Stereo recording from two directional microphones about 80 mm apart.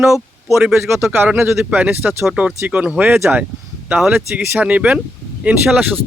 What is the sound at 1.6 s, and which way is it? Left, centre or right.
Speech, centre.